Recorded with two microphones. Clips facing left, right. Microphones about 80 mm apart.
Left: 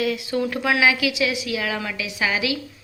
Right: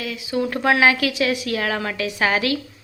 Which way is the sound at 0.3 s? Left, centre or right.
Right.